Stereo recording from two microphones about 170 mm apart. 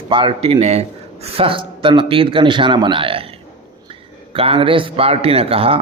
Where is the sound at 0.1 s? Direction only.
30° right (ahead or behind).